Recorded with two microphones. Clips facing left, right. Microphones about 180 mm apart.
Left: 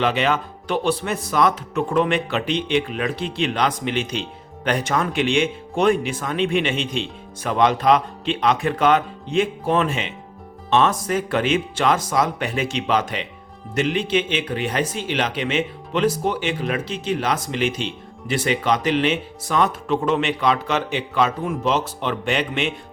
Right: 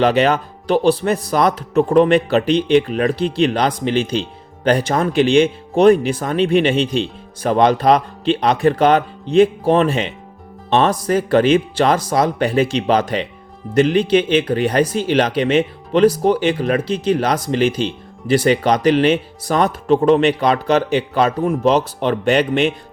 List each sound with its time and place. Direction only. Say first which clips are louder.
0.0 s speech: right 6 dB; 40° right (ahead or behind)